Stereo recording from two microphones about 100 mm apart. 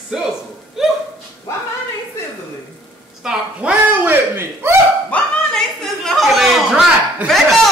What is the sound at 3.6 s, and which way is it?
Speech, 10° right (ahead or behind).